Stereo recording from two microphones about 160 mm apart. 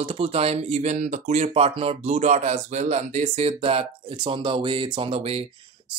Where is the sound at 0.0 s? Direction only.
35° right (ahead or behind).